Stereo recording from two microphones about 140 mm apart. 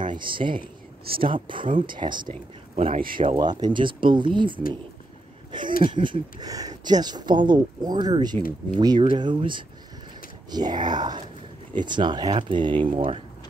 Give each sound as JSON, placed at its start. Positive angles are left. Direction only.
{"t": 0.2, "sound": "speech", "side_deg": -35}
{"t": 0.6, "sound": "a sound", "side_deg": -90}
{"t": 1.2, "sound": "speech", "side_deg": -35}
{"t": 2.7, "sound": "speech", "side_deg": -50}
{"t": 3.2, "sound": "speech", "side_deg": -35}